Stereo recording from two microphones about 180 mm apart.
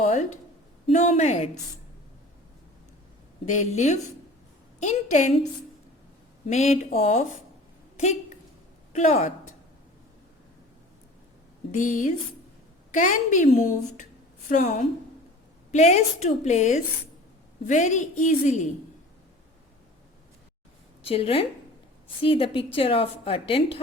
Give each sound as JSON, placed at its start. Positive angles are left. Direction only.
{"t": 0.0, "sound": "a woman's voice", "side_deg": 40}
{"t": 3.4, "sound": "a woman's voice", "side_deg": 40}
{"t": 6.5, "sound": "a woman's voice", "side_deg": 35}
{"t": 11.7, "sound": "a woman's voice", "side_deg": 45}
{"t": 21.0, "sound": "a woman's voice", "side_deg": 30}